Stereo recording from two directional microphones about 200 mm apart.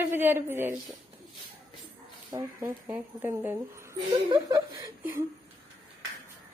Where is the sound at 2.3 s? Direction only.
10° right (ahead or behind).